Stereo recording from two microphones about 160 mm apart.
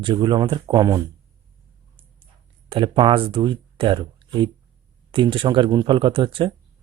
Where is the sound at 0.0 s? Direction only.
30° right (ahead or behind).